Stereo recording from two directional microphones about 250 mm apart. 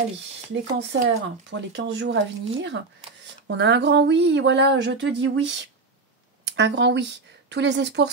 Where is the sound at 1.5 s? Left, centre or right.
Right.